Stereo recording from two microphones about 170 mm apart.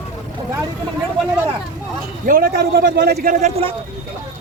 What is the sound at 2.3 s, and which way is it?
A man's voice, 60° right (ahead or behind).